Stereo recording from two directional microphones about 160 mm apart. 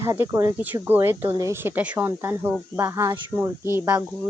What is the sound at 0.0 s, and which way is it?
Speech, 15° right (ahead or behind).